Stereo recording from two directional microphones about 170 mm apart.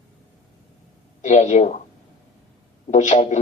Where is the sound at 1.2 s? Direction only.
40° left (ahead or behind).